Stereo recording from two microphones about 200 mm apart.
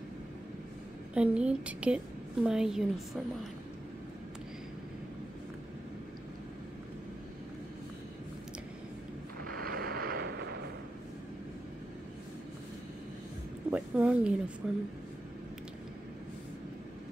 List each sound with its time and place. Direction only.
1.1 s speech: 5° right (ahead or behind)
9.6 s vehicle: 50° right (ahead or behind)
13.7 s a sound: 5° right (ahead or behind)
14.6 s speech: 5° right (ahead or behind)